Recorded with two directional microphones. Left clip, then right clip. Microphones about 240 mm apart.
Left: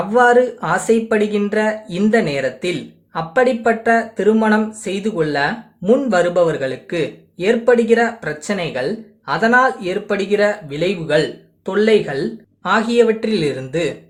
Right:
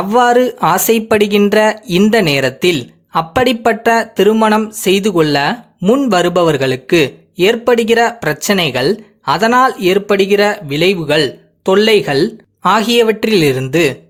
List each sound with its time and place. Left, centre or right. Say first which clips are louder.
0.1 s speech: right 2 dB; right